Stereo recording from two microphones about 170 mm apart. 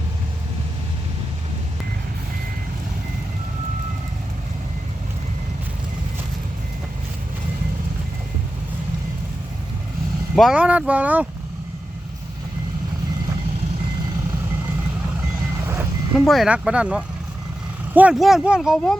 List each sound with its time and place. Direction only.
10.3 s speech: centre (ahead or behind)
15.6 s vehicle: 15° right (ahead or behind)
16.1 s speech: centre (ahead or behind)